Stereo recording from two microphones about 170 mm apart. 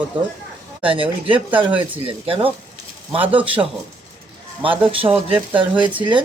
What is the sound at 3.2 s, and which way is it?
Speech, 10° right (ahead or behind).